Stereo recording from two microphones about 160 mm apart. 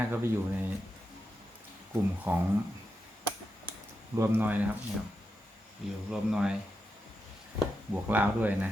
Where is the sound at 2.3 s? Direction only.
10° right (ahead or behind).